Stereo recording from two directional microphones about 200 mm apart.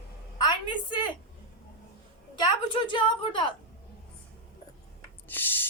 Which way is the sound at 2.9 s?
25° left (ahead or behind).